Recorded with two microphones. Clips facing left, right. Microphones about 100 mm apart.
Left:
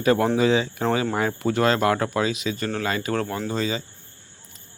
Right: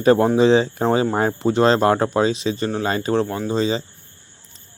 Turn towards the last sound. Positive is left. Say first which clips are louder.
# right 5 dB
turn(degrees=-25)  # may be behind; listen again after turning